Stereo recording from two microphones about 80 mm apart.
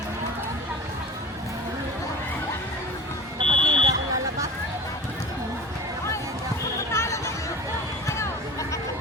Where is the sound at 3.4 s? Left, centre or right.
Right.